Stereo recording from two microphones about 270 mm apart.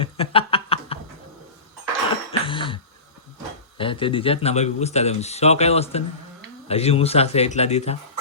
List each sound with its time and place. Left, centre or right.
0.0 s a sound: left
2.4 s throat clearing: centre
3.8 s speech: centre